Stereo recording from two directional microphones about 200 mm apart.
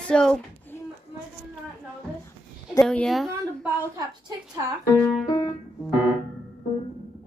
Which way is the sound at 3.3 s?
15° right (ahead or behind).